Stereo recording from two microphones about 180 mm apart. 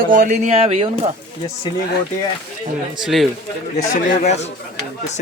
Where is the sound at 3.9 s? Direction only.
50° left (ahead or behind).